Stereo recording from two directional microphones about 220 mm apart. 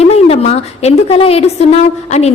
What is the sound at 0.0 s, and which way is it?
A woman's voice, 30° left (ahead or behind).